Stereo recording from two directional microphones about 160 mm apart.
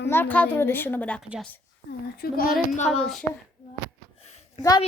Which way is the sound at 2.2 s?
70° left (ahead or behind).